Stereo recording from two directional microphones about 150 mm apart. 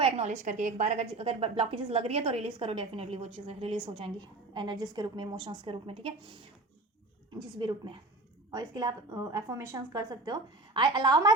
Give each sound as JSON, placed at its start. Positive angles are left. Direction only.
{"t": 0.0, "sound": "a woman's voice", "side_deg": -50}
{"t": 8.4, "sound": "a woman's voice", "side_deg": -25}